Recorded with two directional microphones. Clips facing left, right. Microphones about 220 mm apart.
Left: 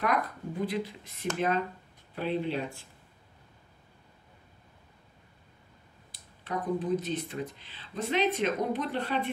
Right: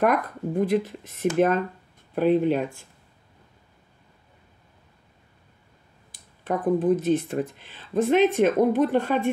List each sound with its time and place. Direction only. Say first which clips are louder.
0.0 s speech: right 7 dB; 50° right (ahead or behind)
6.1 s speech: right 7 dB; 50° right (ahead or behind)